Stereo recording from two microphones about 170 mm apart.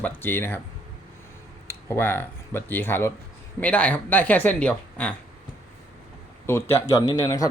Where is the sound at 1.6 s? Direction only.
15° left (ahead or behind).